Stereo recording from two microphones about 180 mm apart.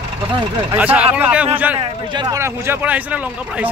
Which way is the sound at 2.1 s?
20° right (ahead or behind).